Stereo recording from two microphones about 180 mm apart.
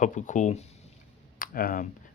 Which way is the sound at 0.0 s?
45° left (ahead or behind).